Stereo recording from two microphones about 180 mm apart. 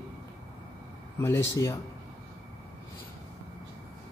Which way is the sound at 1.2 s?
15° left (ahead or behind).